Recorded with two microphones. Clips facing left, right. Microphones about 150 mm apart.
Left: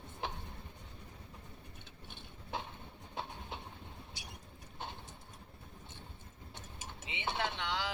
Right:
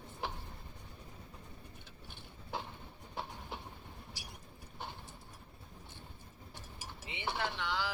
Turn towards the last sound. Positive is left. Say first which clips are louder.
# even
turn(degrees=20)  # may be behind; listen again after turning